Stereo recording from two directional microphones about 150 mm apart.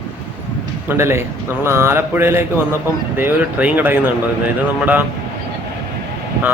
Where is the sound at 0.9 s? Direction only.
15° right (ahead or behind).